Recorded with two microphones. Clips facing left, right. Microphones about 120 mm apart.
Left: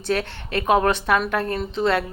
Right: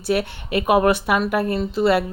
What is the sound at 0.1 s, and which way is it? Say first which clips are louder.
A woman's voice: right 3 dB; 10° right (ahead or behind).